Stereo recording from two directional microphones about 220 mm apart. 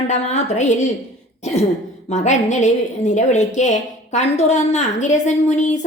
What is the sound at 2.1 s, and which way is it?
A woman's voice, 30° left (ahead or behind).